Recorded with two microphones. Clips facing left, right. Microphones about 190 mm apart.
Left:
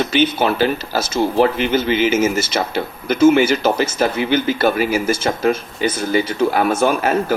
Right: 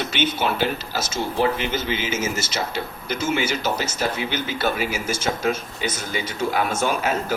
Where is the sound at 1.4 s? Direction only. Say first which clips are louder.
Left 5 dB; 65° left (ahead or behind).